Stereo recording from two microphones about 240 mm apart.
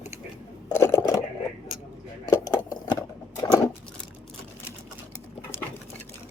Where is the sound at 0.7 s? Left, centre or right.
Centre.